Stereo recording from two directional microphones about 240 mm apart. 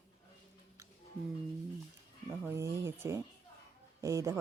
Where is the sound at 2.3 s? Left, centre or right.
Centre.